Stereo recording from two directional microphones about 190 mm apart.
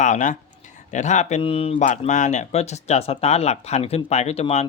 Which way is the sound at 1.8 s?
40° left (ahead or behind).